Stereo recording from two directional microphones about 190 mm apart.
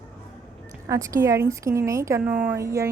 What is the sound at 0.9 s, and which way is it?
A woman's voice, 15° right (ahead or behind).